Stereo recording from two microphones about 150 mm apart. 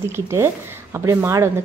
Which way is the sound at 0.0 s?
15° right (ahead or behind).